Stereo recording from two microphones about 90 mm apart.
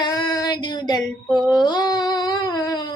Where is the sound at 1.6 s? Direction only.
50° left (ahead or behind).